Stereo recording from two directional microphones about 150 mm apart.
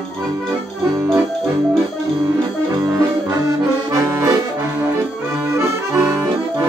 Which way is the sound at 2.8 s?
25° right (ahead or behind).